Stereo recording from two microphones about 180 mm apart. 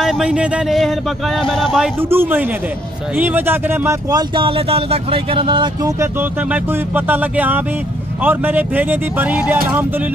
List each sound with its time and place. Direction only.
0.0 s speech: 5° right (ahead or behind)
2.0 s speech: 10° right (ahead or behind)
4.4 s speech: 30° right (ahead or behind)
6.5 s speech: 10° right (ahead or behind)